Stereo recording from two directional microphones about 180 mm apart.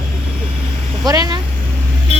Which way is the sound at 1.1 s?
20° right (ahead or behind).